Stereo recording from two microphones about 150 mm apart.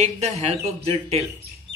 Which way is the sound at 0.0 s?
45° right (ahead or behind).